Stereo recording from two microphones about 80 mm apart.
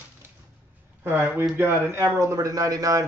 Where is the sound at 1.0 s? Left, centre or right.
Right.